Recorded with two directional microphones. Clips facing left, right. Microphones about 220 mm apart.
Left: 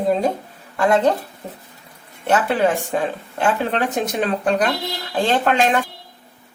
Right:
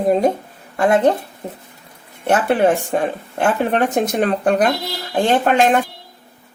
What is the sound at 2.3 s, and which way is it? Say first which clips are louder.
Speech: right 3 dB; 50° right (ahead or behind).